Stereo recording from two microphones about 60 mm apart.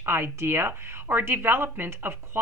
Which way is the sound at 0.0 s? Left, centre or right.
Right.